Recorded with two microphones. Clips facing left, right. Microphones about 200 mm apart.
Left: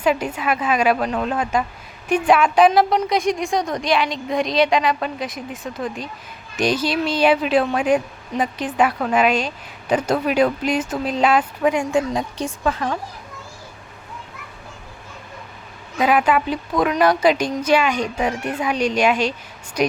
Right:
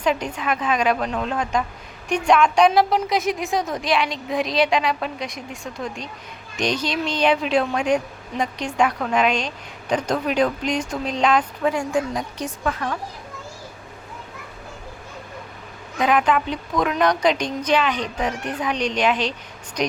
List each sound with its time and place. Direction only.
0.0 s a woman's voice: 5° left (ahead or behind)
11.7 s a woman's voice: 25° left (ahead or behind)
16.0 s a woman's voice: 5° left (ahead or behind)